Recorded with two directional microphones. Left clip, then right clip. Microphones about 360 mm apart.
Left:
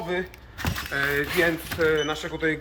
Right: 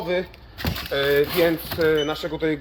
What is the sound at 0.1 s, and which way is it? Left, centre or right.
Speech, centre.